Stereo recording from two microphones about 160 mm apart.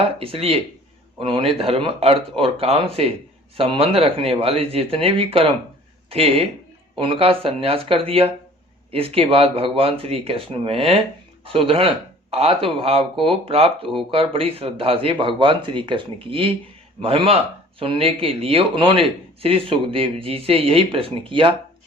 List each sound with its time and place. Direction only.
0.2 s speech: 35° right (ahead or behind)